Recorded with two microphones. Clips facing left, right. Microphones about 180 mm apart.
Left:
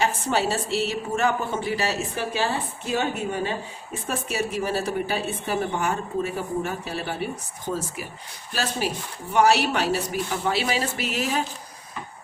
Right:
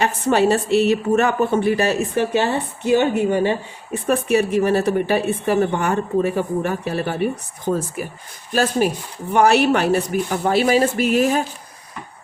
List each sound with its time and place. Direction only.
0.0 s a woman's voice: 60° right (ahead or behind)
8.5 s speech: 50° right (ahead or behind)